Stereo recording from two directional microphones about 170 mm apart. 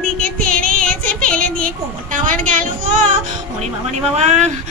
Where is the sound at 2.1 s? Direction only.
50° right (ahead or behind).